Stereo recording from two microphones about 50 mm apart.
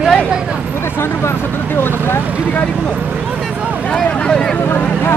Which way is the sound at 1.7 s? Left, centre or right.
Left.